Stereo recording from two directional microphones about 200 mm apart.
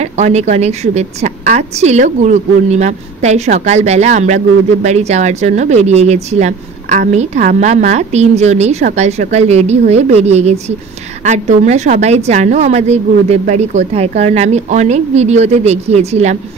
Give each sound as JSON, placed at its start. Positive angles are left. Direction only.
{"t": 0.0, "sound": "speech", "side_deg": -35}